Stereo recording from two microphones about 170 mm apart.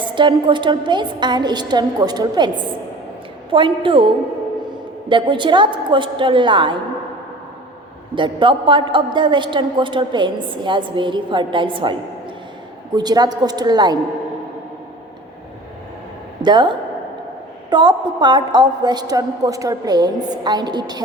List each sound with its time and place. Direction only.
0.0 s a woman's voice: 30° right (ahead or behind)
3.5 s a woman's voice: 30° right (ahead or behind)
8.1 s a woman's voice: 30° right (ahead or behind)
13.0 s a woman's voice: 25° right (ahead or behind)
16.4 s a woman's voice: 25° right (ahead or behind)